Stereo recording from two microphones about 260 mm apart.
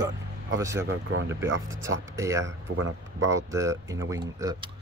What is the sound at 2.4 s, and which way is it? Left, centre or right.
Speech, right.